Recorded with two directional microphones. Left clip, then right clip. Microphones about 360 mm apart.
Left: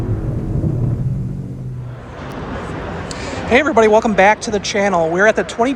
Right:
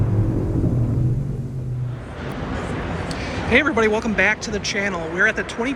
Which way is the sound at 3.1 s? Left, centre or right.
Centre.